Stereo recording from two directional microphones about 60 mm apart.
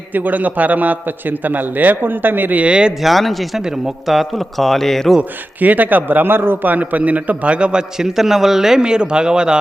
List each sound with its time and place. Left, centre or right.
0.1 s a man's voice: right
3.0 s a man's voice: centre
3.6 s a man's voice: centre
5.5 s a man's voice: right